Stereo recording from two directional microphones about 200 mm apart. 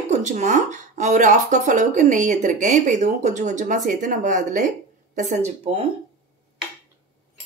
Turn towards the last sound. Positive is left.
turn(degrees=-25)  # may be behind; listen again after turning